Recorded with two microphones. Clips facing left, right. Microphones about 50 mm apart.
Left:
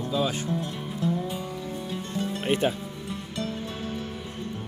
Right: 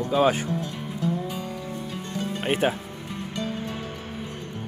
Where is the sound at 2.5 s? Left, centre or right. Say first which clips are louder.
Right 2 dB; right.